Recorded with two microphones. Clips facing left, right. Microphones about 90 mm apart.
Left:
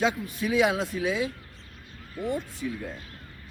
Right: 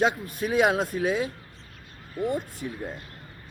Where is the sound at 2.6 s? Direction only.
35° right (ahead or behind).